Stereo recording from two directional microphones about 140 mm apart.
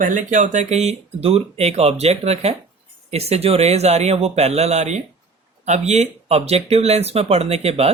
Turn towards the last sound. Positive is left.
turn(degrees=-45)  # may be behind; listen again after turning